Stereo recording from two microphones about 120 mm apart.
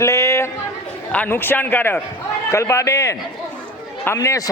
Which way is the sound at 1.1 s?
15° left (ahead or behind).